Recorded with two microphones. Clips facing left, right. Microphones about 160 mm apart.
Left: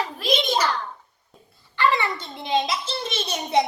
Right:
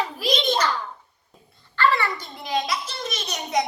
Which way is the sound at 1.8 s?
20° left (ahead or behind).